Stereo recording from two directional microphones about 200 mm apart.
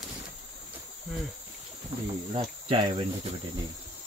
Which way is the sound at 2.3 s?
25° right (ahead or behind).